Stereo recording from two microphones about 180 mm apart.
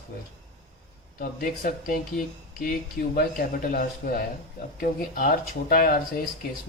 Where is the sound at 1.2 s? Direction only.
55° left (ahead or behind).